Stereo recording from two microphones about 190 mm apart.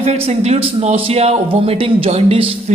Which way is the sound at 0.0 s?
35° right (ahead or behind).